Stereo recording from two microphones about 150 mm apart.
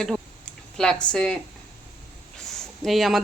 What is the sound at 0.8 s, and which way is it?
Speech, 5° left (ahead or behind).